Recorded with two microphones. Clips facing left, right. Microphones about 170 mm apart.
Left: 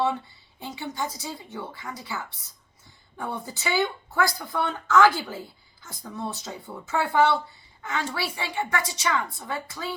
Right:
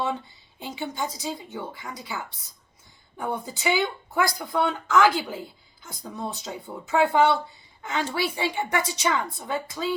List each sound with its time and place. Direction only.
0.6 s a woman's voice: 20° right (ahead or behind)